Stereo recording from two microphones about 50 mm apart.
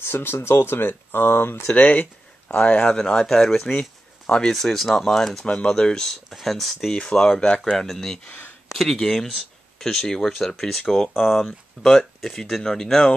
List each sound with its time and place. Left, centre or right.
0.0 s speech: left
1.8 s speech: left
3.0 s speech: centre
4.6 s speech: centre
5.4 s speech: centre
6.3 s speech: centre
6.9 s speech: centre
7.7 s speech: centre
8.3 s a sound: left
8.7 s speech: centre